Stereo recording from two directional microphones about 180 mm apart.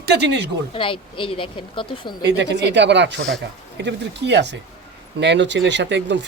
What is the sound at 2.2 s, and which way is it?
Speech, 70° right (ahead or behind).